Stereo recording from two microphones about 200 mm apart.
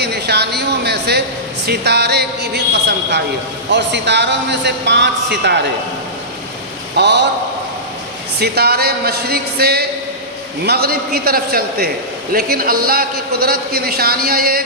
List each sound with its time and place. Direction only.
0.0 s a sound: 55° right (ahead or behind)
1.6 s a man's voice: 55° right (ahead or behind)
6.9 s a man's voice: 60° right (ahead or behind)
8.4 s a man's voice: 55° right (ahead or behind)